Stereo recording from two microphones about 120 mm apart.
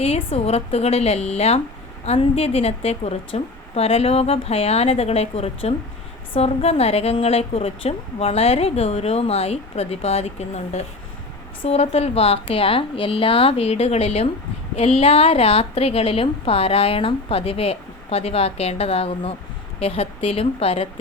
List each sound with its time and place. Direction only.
0.0 s a woman's voice: 55° left (ahead or behind)